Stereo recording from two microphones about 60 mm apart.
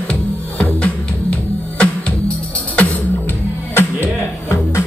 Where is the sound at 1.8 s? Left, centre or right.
Centre.